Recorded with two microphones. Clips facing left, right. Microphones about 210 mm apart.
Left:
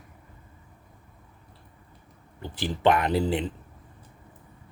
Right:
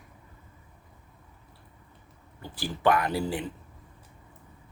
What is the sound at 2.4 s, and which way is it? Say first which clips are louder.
Speech: left 2 dB; 20° left (ahead or behind).